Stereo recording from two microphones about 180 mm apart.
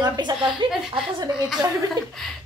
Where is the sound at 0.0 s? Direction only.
20° right (ahead or behind).